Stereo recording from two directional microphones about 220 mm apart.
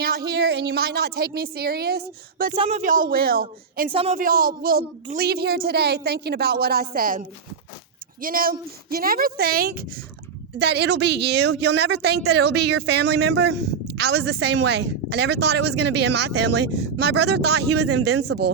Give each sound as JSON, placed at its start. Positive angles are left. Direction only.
{"t": 0.0, "sound": "a woman's voice", "side_deg": -45}
{"t": 2.6, "sound": "speech", "side_deg": -30}
{"t": 3.9, "sound": "a woman's voice", "side_deg": -30}
{"t": 8.2, "sound": "a woman's voice", "side_deg": -40}